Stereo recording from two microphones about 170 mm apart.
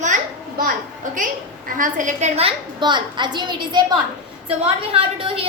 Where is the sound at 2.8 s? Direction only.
25° right (ahead or behind).